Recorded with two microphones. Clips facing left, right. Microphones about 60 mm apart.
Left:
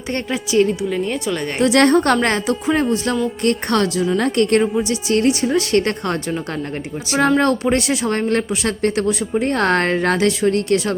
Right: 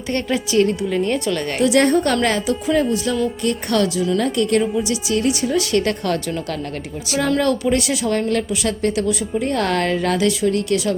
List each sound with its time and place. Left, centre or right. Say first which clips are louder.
0.3 s a woman's voice: left 1 dB; centre
0.7 s speech: right 1 dB; centre
1.6 s speech: left 2 dB; left
2.2 s speech: left 1 dB; left
4.2 s speech: left 3 dB; left
4.8 s a woman's voice: left 2 dB; left